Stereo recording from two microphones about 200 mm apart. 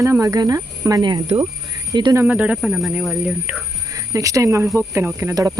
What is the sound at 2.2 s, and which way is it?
A man's voice, 5° right (ahead or behind).